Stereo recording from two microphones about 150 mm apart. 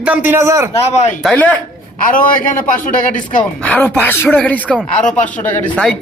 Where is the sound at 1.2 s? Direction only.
10° left (ahead or behind).